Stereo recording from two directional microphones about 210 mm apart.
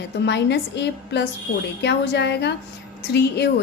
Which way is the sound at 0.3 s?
55° left (ahead or behind).